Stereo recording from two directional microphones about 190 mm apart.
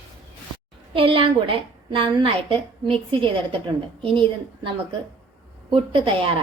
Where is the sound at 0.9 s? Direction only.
30° right (ahead or behind).